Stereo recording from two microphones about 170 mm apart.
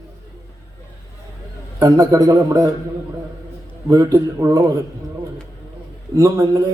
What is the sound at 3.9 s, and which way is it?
Speech, 20° right (ahead or behind).